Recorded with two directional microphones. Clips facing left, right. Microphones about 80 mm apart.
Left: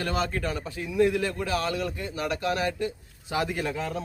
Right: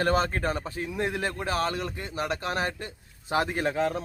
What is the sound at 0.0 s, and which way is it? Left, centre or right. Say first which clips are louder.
A man's voice: right 3 dB; right.